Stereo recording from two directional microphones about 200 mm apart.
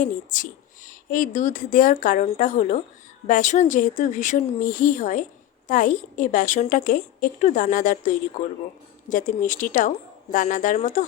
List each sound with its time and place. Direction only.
0.0 s a woman's voice: 40° left (ahead or behind)